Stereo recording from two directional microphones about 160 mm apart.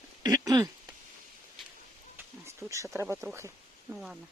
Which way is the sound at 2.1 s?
15° right (ahead or behind).